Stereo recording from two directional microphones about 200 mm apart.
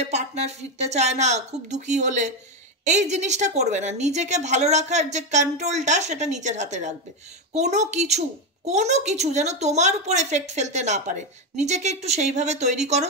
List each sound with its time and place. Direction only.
0.0 s speech: 35° right (ahead or behind)